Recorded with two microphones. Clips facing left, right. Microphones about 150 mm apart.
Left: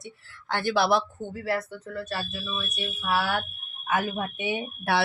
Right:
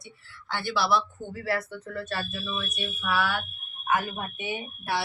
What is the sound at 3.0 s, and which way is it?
Speech, 30° left (ahead or behind).